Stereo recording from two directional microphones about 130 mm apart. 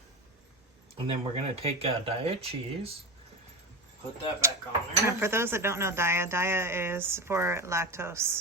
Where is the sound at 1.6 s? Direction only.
50° right (ahead or behind).